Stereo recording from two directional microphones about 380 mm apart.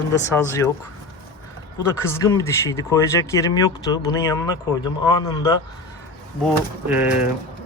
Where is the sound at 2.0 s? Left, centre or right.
Centre.